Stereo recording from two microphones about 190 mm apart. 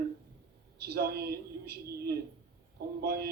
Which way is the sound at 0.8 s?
55° right (ahead or behind).